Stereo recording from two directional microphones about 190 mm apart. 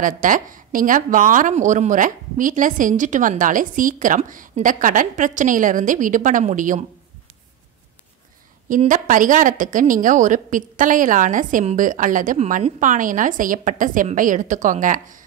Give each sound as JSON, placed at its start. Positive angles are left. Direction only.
{"t": 0.0, "sound": "a woman's voice", "side_deg": -45}
{"t": 8.6, "sound": "a woman's voice", "side_deg": -45}